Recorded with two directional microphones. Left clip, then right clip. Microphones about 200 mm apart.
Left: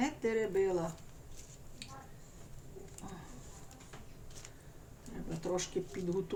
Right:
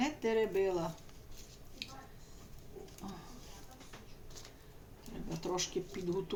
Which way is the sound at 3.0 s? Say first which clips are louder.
Right 1 dB; 20° right (ahead or behind).